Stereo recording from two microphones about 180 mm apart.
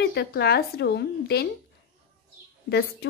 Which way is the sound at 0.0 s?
65° left (ahead or behind).